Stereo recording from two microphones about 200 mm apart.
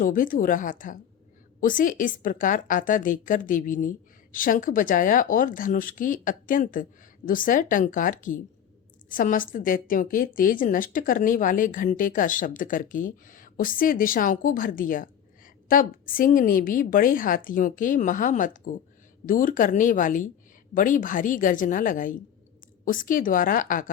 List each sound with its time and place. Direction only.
0.0 s a woman's voice: 45° left (ahead or behind)